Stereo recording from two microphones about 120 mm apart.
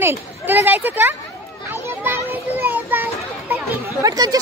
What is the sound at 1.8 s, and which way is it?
Children playing, 20° right (ahead or behind).